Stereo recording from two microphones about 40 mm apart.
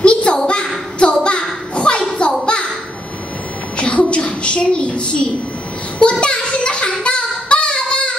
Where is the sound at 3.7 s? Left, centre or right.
Left.